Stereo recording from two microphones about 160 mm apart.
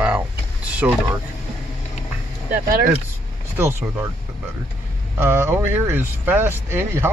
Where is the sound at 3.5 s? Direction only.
15° right (ahead or behind).